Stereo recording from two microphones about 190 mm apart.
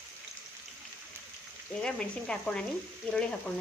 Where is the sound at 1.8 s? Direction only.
5° left (ahead or behind).